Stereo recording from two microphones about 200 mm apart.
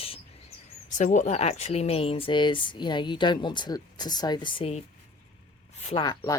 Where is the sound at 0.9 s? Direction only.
35° left (ahead or behind).